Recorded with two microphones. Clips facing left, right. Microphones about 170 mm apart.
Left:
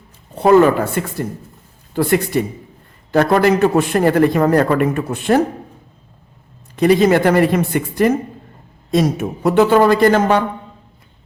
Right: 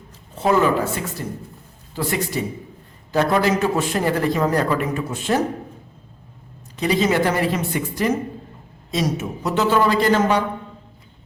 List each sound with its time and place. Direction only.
0.3 s a man's voice: 60° left (ahead or behind)
6.7 s a man's voice: 55° left (ahead or behind)